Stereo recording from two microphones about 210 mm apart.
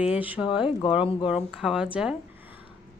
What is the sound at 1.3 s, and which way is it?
Speech, 5° right (ahead or behind).